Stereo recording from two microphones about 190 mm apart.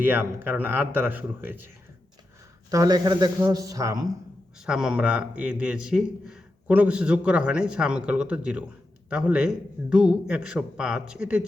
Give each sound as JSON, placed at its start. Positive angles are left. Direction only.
{"t": 0.0, "sound": "a man's voice", "side_deg": -10}
{"t": 4.6, "sound": "a man's voice", "side_deg": -5}